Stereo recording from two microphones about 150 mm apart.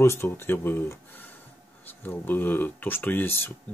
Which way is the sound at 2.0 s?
10° left (ahead or behind).